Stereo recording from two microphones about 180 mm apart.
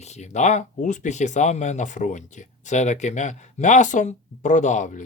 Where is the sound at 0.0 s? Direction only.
40° left (ahead or behind).